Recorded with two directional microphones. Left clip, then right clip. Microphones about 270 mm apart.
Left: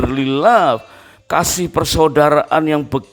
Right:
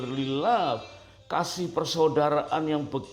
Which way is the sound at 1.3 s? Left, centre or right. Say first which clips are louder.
Left 12 dB; left.